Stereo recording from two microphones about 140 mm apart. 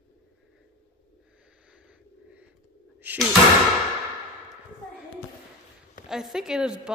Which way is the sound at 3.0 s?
10° right (ahead or behind).